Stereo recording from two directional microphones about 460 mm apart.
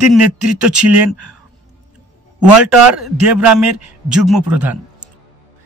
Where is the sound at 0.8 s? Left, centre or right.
Right.